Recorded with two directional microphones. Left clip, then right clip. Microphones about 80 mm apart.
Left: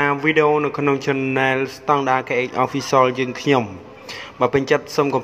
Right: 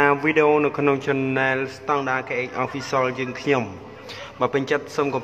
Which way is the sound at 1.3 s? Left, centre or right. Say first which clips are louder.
Left 3 dB; left.